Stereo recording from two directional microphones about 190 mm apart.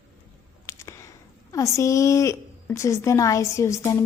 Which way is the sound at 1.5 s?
15° left (ahead or behind).